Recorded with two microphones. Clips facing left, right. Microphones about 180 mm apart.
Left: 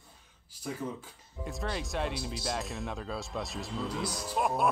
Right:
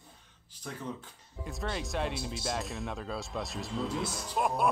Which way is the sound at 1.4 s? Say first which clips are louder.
Left 1 dB; centre (ahead or behind).